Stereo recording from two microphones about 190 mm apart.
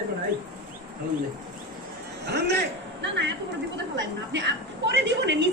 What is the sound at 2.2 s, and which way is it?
A woman's voice, 60° right (ahead or behind).